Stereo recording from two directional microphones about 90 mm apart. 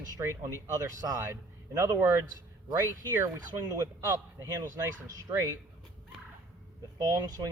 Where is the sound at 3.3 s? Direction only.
40° right (ahead or behind).